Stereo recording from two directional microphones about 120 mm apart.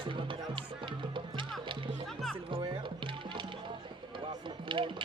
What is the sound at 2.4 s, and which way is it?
Music, 45° right (ahead or behind).